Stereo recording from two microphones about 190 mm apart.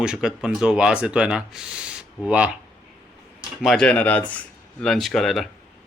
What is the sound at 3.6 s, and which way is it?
Speech, 5° left (ahead or behind).